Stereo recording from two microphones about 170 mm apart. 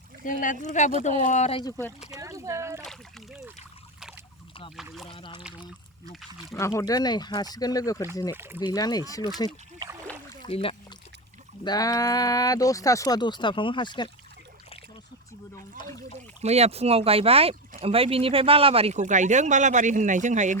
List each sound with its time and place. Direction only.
0.3 s speech: 50° left (ahead or behind)
2.1 s a sound: 20° right (ahead or behind)
2.8 s splash: centre (ahead or behind)
5.0 s speech: 30° left (ahead or behind)
5.4 s speech: 5° right (ahead or behind)
6.5 s speech: 15° left (ahead or behind)
8.3 s speech: 15° right (ahead or behind)
8.6 s speech: 25° left (ahead or behind)
9.7 s boat: 25° right (ahead or behind)
10.4 s speech: 35° left (ahead or behind)
11.6 s speech: 20° left (ahead or behind)
16.4 s speech: 40° right (ahead or behind)